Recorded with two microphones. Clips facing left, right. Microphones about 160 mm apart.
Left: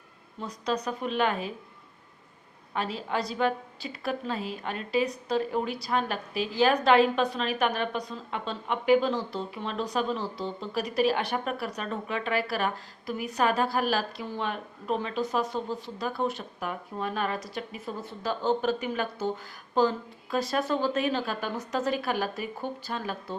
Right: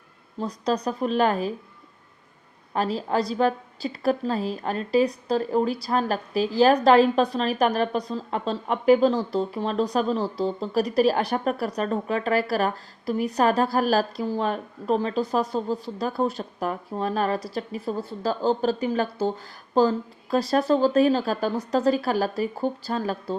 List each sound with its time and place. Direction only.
0.3 s speech: 35° right (ahead or behind)
2.7 s speech: 40° right (ahead or behind)